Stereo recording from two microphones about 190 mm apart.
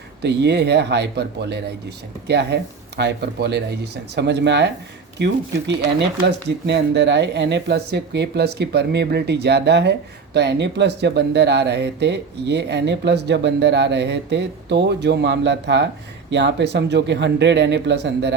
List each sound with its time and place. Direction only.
0.2 s speech: 60° right (ahead or behind)